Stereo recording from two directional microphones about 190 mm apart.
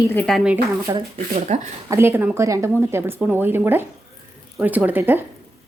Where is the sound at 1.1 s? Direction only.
35° right (ahead or behind).